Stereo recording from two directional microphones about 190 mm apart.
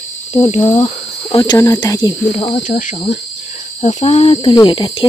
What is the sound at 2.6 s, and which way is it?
Speech, 45° left (ahead or behind).